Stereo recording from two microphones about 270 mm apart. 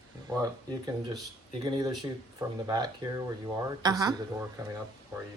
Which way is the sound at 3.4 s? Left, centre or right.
Centre.